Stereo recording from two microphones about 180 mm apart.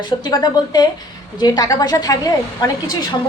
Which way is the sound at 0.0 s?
25° left (ahead or behind).